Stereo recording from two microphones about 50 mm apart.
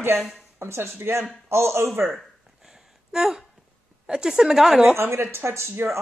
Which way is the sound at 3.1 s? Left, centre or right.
Centre.